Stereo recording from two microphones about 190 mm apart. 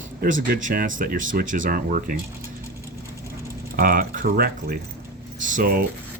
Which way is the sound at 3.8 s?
50° right (ahead or behind).